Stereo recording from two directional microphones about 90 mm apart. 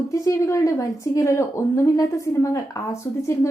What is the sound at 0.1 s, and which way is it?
Speech, 35° left (ahead or behind).